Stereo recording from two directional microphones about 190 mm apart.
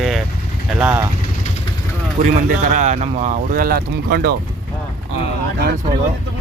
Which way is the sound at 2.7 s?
40° right (ahead or behind).